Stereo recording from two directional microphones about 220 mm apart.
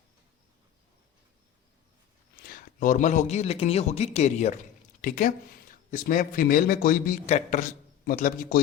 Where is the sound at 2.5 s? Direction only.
40° left (ahead or behind).